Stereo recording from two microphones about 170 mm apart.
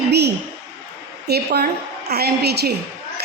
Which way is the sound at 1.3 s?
70° right (ahead or behind).